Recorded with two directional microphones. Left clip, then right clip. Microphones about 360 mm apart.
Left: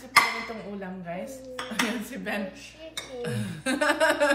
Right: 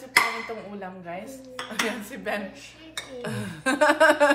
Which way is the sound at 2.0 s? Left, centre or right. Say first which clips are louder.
Right 2 dB; centre.